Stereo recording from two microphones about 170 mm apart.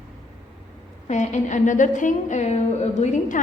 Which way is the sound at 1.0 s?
45° left (ahead or behind).